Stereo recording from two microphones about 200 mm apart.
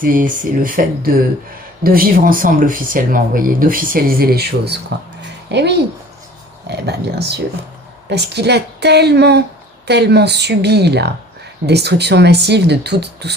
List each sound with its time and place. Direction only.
0.0 s speech: 45° right (ahead or behind)